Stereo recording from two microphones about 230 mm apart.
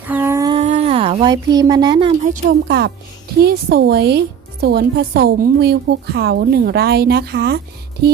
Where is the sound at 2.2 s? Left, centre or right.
Right.